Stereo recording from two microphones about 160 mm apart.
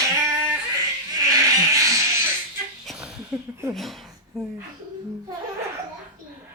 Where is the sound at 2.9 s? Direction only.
5° right (ahead or behind).